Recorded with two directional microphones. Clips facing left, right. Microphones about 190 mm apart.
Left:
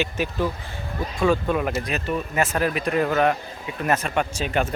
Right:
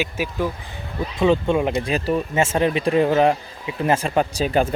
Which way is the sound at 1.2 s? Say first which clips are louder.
Right 3 dB; 25° right (ahead or behind).